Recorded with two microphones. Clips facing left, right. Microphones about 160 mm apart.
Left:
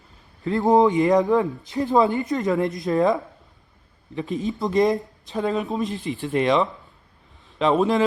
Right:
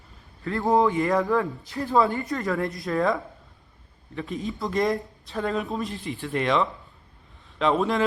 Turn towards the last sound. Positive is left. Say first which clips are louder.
# left 4 dB
turn(degrees=0)  # may be behind; listen again after turning